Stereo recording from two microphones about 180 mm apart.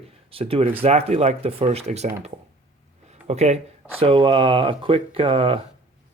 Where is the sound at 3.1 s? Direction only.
40° right (ahead or behind).